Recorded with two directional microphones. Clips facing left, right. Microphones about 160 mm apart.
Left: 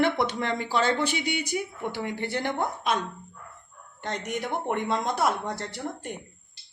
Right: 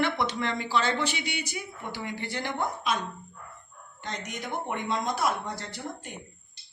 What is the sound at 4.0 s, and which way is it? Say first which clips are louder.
Speech: left 6 dB; 60° left (ahead or behind).